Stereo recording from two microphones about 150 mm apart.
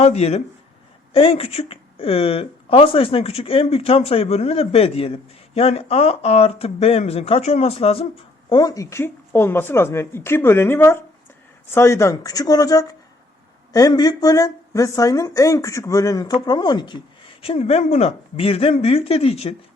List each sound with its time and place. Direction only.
0.0 s speech: 45° left (ahead or behind)
8.4 s a woman's voice: 30° left (ahead or behind)